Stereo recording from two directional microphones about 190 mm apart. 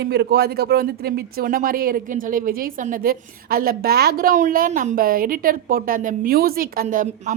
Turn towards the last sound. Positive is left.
turn(degrees=-45)  # may be behind; listen again after turning